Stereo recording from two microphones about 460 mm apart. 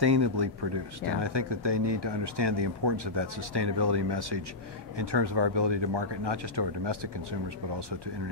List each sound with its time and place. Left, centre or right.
0.0 s speech: right